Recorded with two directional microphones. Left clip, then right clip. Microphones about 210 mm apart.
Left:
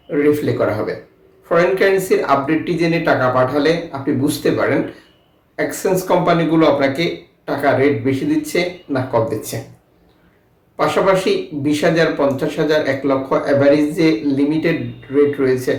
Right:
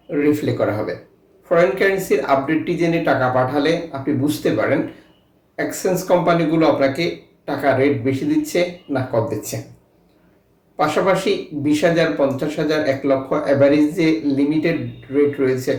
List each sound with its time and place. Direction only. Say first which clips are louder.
0.1 s speech: left 3 dB; 5° left (ahead or behind)
10.8 s speech: left 2 dB; 10° left (ahead or behind)